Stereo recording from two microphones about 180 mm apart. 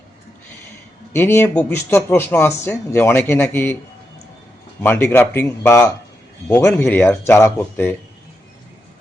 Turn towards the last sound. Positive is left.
turn(degrees=15)  # may be behind; listen again after turning